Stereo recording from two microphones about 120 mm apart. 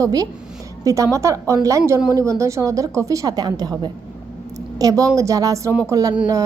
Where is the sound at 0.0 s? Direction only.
30° right (ahead or behind).